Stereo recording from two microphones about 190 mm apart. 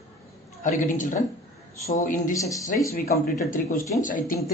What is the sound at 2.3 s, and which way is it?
Speech, 15° left (ahead or behind).